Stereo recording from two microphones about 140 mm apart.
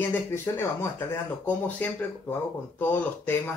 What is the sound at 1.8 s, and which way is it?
Speech, 10° left (ahead or behind).